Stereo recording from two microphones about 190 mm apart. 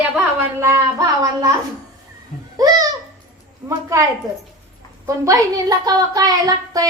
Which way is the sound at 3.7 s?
15° right (ahead or behind).